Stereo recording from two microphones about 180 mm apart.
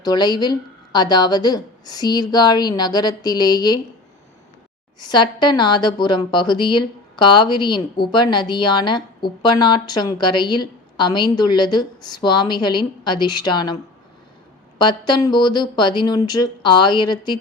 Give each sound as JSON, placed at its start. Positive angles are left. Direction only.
{"t": 0.0, "sound": "a woman's voice", "side_deg": 25}
{"t": 5.0, "sound": "a woman's voice", "side_deg": 25}
{"t": 14.8, "sound": "a woman's voice", "side_deg": 25}